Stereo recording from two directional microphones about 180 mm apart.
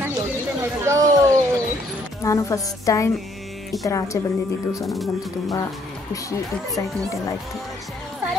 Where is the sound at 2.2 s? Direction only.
15° left (ahead or behind).